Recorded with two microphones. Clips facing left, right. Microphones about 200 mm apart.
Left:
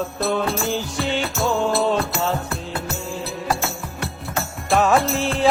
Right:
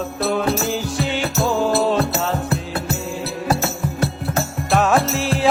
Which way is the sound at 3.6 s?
40° right (ahead or behind).